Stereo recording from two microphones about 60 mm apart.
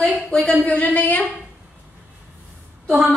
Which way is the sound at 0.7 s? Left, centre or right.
Left.